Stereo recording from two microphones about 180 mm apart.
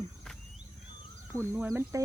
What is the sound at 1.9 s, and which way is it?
Music, 15° right (ahead or behind).